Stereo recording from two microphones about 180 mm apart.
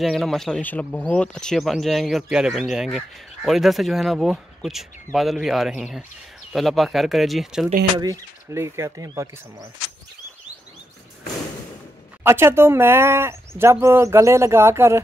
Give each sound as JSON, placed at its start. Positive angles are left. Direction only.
{"t": 0.0, "sound": "speech", "side_deg": 0}
{"t": 8.0, "sound": "speech", "side_deg": -15}
{"t": 12.2, "sound": "speech", "side_deg": -15}